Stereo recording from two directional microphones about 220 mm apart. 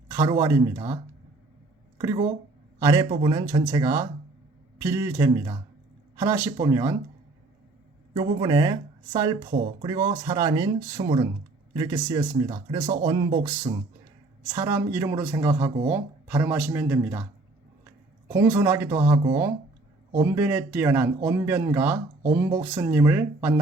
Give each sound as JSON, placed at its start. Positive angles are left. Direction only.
{"t": 0.1, "sound": "speech", "side_deg": -15}
{"t": 2.0, "sound": "speech", "side_deg": -15}
{"t": 8.1, "sound": "speech", "side_deg": -20}
{"t": 12.5, "sound": "speech", "side_deg": -25}
{"t": 13.1, "sound": "speech", "side_deg": -15}
{"t": 18.3, "sound": "speech", "side_deg": -10}